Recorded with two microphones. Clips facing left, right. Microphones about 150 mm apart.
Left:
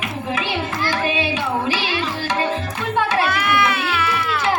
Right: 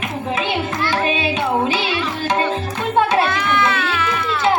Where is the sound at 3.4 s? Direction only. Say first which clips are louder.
Right 1 dB; 10° left (ahead or behind).